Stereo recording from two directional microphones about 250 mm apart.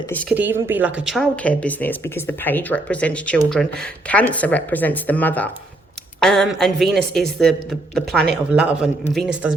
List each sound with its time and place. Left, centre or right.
0.1 s speech: centre
0.3 s speech: centre